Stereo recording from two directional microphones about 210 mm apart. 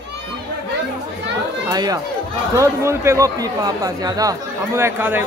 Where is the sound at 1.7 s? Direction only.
15° right (ahead or behind).